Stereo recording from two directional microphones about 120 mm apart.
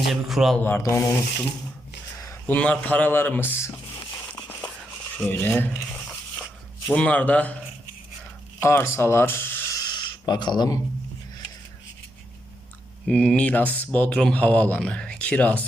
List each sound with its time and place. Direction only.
0.1 s speech: centre (ahead or behind)
0.8 s speech: 25° left (ahead or behind)
2.1 s a sound: 25° left (ahead or behind)
2.5 s speech: 10° left (ahead or behind)
4.3 s crumpling: 10° left (ahead or behind)
5.1 s a sound: 15° left (ahead or behind)
6.9 s speech: 10° left (ahead or behind)
8.6 s speech: 20° left (ahead or behind)
9.7 s a sound: 35° left (ahead or behind)
13.1 s speech: 10° left (ahead or behind)